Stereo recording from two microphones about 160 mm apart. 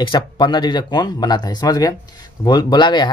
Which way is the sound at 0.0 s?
30° left (ahead or behind).